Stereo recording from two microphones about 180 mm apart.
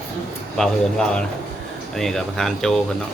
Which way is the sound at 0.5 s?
5° left (ahead or behind).